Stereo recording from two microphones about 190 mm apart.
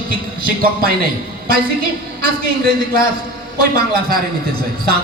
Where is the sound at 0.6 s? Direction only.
50° right (ahead or behind).